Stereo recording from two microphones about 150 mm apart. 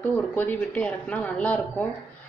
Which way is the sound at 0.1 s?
10° left (ahead or behind).